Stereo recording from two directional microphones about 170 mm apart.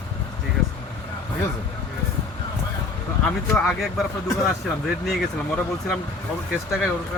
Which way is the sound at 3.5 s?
Centre (ahead or behind).